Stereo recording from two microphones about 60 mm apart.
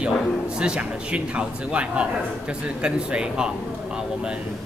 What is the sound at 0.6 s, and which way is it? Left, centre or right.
A man's voice, centre.